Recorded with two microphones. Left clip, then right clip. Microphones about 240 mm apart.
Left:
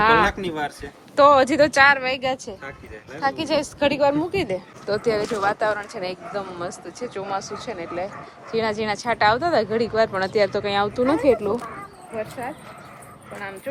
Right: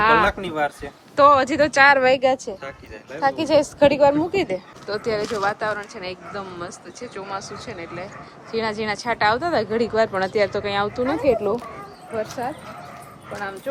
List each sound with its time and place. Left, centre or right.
0.0 s speech: centre
2.0 s a woman's voice: right; by 11.6 s centre